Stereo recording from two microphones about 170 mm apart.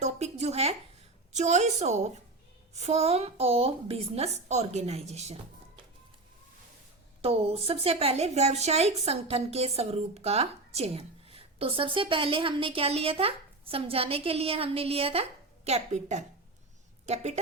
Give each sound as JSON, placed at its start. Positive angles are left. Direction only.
{"t": 0.0, "sound": "a sound", "side_deg": -40}
{"t": 1.3, "sound": "a woman's voice", "side_deg": -45}
{"t": 7.2, "sound": "a woman's voice", "side_deg": -35}